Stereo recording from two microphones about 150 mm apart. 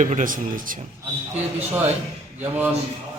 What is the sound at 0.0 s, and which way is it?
Speech, 55° right (ahead or behind).